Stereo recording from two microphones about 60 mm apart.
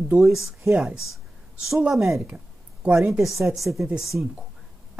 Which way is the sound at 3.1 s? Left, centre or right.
Centre.